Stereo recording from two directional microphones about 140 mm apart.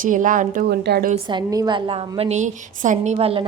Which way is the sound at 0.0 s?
70° right (ahead or behind).